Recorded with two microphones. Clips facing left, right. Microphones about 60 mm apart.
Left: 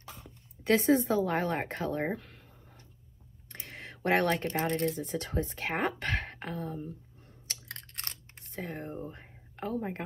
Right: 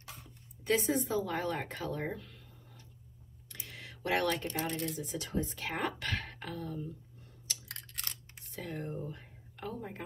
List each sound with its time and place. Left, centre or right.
0.2 s speech: left
3.4 s a sound: left
4.6 s speech: left
7.4 s chewing: left
8.5 s speech: left